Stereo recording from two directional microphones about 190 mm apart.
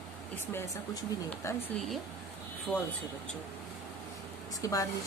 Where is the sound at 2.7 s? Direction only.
Centre (ahead or behind).